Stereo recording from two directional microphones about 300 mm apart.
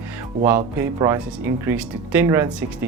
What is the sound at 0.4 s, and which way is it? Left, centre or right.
Speech, centre.